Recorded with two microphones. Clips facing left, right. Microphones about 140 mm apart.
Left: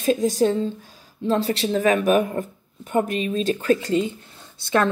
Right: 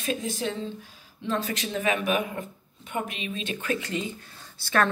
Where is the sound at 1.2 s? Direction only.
35° left (ahead or behind).